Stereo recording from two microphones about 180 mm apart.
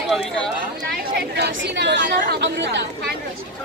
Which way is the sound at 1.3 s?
75° right (ahead or behind).